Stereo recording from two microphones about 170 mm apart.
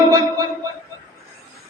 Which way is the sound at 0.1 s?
20° right (ahead or behind).